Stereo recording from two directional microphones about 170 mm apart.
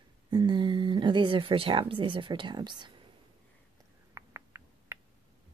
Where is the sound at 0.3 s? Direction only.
25° right (ahead or behind).